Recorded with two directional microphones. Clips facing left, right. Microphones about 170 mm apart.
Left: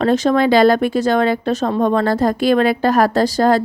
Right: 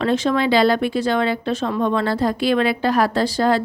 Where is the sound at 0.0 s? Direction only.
40° left (ahead or behind).